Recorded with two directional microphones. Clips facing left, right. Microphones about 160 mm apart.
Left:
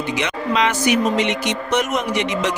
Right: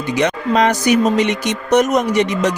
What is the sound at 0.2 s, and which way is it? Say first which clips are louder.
A man's voice: right 6 dB; 45° right (ahead or behind).